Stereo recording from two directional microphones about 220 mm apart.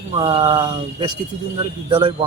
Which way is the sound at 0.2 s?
20° right (ahead or behind).